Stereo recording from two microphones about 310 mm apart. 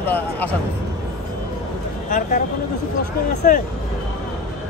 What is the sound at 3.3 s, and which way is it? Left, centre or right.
Speech, left.